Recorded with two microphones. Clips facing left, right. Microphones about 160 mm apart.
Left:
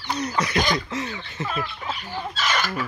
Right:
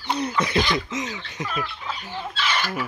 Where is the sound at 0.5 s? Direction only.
45° left (ahead or behind).